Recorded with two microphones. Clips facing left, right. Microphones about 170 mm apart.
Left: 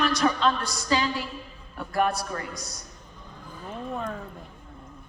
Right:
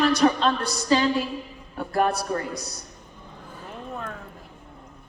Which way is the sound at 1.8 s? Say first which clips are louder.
Right 2 dB; 30° right (ahead or behind).